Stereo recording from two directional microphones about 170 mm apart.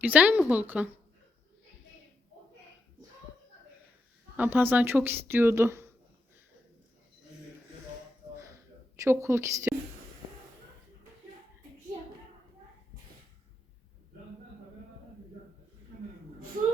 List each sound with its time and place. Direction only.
0.0 s a woman's voice: 10° right (ahead or behind)
4.4 s a woman's voice: 10° right (ahead or behind)
9.0 s a woman's voice: 15° right (ahead or behind)